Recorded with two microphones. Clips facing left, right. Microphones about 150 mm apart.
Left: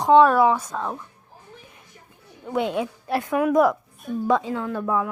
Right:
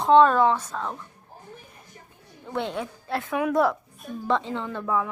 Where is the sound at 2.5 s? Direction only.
15° left (ahead or behind).